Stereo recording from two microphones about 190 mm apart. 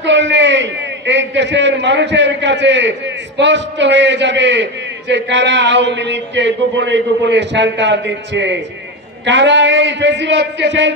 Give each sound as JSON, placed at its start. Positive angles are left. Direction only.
{"t": 0.0, "sound": "a man's voice", "side_deg": -70}